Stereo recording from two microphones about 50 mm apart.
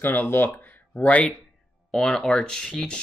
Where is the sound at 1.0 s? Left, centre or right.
Left.